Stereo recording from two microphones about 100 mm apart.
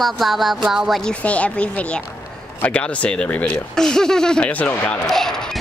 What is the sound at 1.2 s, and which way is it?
Speech, 15° left (ahead or behind).